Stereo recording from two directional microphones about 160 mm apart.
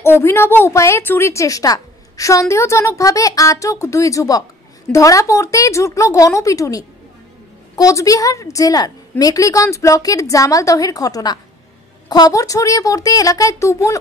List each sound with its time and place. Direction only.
0.0 s a woman's voice: 15° left (ahead or behind)